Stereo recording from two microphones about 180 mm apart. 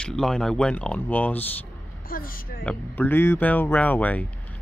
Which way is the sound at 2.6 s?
10° left (ahead or behind).